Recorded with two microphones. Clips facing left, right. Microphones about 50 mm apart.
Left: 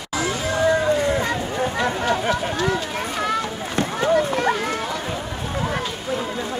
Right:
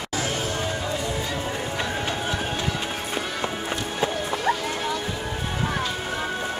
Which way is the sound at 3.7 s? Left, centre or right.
Left.